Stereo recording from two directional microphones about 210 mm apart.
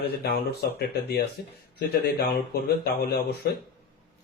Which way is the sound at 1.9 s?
50° left (ahead or behind).